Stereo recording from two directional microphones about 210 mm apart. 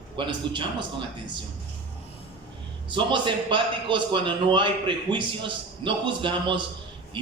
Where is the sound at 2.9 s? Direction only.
25° right (ahead or behind).